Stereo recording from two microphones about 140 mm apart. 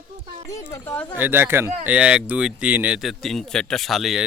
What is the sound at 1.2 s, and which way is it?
Speech, 15° right (ahead or behind).